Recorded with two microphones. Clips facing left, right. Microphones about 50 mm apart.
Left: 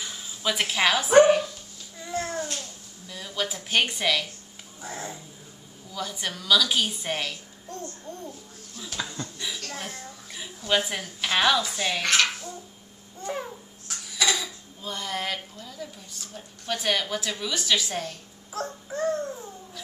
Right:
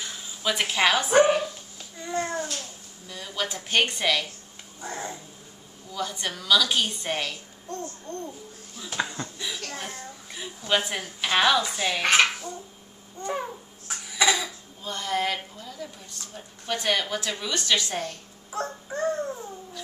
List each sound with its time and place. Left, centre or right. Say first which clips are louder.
0.0 s speech: even; centre
2.0 s babbling: right 2 dB; centre
3.1 s a sound: even; centre
3.4 s a woman's voice: right 1 dB; centre
8.9 s speech: right 4 dB; right
9.7 s a child's voice: right 1 dB; centre
12.0 s a child's voice: right 4 dB; centre
13.2 s a woman's voice: right 2 dB; centre
13.8 s a sound: right 3 dB; centre
14.8 s a woman's voice: right 4 dB; centre